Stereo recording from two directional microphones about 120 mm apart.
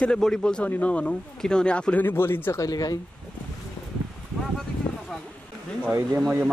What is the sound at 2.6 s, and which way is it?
Speech, 30° left (ahead or behind).